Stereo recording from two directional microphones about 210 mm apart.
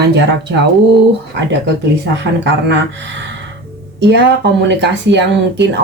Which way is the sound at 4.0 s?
55° right (ahead or behind).